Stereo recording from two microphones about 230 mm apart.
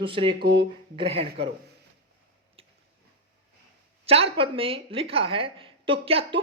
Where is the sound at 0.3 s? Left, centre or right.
Right.